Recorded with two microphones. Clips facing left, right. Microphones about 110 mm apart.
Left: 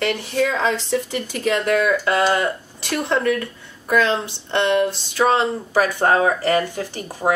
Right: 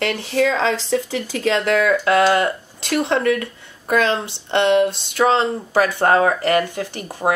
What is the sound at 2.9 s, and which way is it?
Speech, 65° right (ahead or behind).